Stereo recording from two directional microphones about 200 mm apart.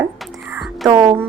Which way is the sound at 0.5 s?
Centre (ahead or behind).